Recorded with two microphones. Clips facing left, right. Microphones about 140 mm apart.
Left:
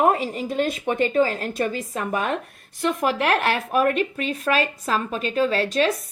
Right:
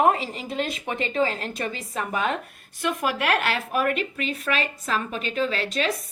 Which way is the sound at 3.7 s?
40° left (ahead or behind).